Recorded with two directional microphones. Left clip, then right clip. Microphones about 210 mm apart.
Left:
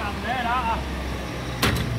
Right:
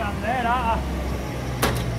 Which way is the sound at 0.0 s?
40° right (ahead or behind).